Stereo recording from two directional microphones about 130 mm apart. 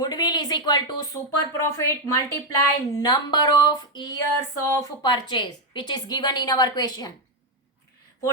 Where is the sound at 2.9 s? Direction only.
30° left (ahead or behind).